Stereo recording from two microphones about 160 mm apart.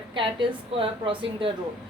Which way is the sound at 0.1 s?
30° right (ahead or behind).